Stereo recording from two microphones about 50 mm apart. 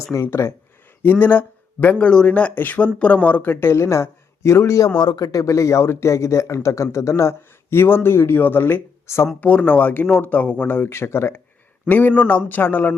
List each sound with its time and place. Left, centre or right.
0.4 s speech: left
1.0 s speech: left
2.0 s speech: left
2.6 s speech: left
3.4 s speech: left
3.8 s speech: left
5.5 s a man's voice: left
7.7 s speech: left
8.4 s speech: left
9.1 s speech: left
9.4 s speech: left
10.7 s speech: left
11.9 s speech: left